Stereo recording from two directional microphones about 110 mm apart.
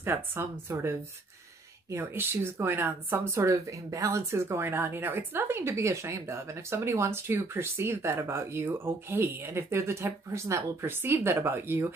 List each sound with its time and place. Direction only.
0.0 s speech: 20° right (ahead or behind)